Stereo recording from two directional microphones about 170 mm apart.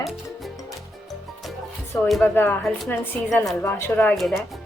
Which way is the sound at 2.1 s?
Centre (ahead or behind).